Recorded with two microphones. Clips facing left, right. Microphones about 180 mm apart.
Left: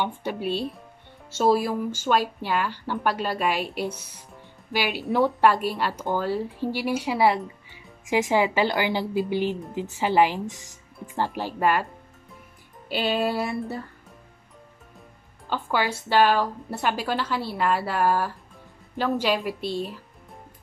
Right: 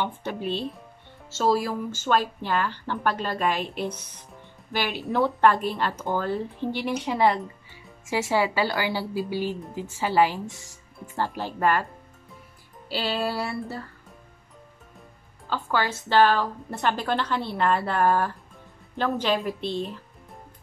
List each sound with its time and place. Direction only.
0.0 s a woman's voice: 10° left (ahead or behind)
5.1 s a woman's voice: 15° left (ahead or behind)
12.8 s a woman's voice: 15° left (ahead or behind)
15.5 s a woman's voice: 15° left (ahead or behind)